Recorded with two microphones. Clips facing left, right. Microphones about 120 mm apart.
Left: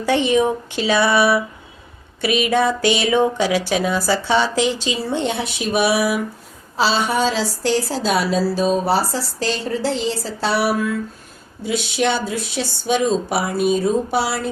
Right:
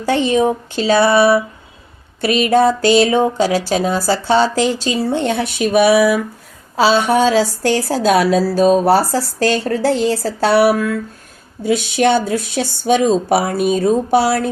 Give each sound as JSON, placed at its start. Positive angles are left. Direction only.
{"t": 0.0, "sound": "a woman's voice", "side_deg": -35}